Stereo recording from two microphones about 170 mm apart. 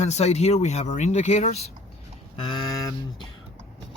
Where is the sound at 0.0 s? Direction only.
40° left (ahead or behind).